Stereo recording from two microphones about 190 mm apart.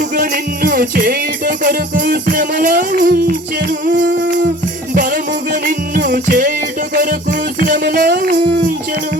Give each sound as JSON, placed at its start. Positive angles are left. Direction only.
{"t": 0.2, "sound": "music", "side_deg": -45}
{"t": 3.7, "sound": "humming", "side_deg": -45}
{"t": 4.9, "sound": "music", "side_deg": -45}
{"t": 5.6, "sound": "music", "side_deg": -55}
{"t": 6.9, "sound": "music", "side_deg": -45}